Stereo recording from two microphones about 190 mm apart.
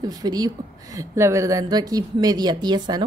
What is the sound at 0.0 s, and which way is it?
A woman's voice, 20° right (ahead or behind).